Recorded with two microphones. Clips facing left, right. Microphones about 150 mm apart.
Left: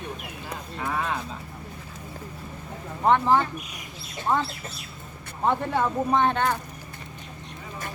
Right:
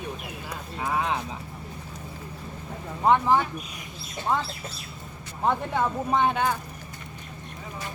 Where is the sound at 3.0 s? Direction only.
10° right (ahead or behind).